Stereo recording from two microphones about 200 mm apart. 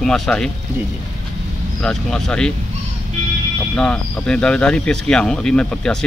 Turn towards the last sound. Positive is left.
turn(degrees=5)  # may be behind; listen again after turning